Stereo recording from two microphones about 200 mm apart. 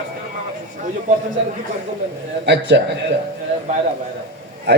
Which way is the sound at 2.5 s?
60° right (ahead or behind).